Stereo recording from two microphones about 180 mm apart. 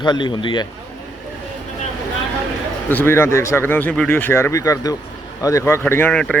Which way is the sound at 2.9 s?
10° left (ahead or behind).